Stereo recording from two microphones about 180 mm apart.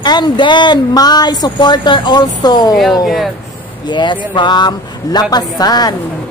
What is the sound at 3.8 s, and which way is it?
Speech, 25° left (ahead or behind).